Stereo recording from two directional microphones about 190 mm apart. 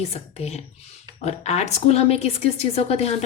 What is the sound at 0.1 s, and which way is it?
A woman's voice, 35° left (ahead or behind).